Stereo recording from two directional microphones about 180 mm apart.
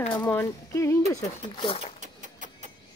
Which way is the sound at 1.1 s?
30° left (ahead or behind).